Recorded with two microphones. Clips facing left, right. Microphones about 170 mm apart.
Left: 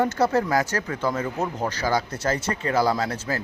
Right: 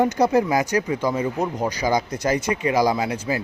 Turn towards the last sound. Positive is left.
turn(degrees=-15)  # may be behind; listen again after turning